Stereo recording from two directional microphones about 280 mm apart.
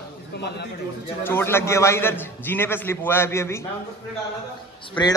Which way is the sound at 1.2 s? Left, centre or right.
Centre.